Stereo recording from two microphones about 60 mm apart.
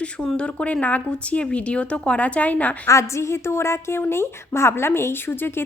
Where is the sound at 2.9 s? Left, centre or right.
Left.